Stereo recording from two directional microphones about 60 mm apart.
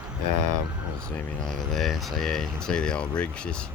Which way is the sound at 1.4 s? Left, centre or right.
Centre.